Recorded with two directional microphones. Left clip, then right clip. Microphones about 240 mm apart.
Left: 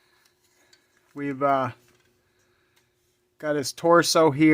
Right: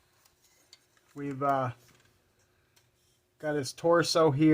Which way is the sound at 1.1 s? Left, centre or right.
Left.